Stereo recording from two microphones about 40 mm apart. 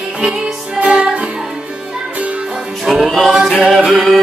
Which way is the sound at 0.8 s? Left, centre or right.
Right.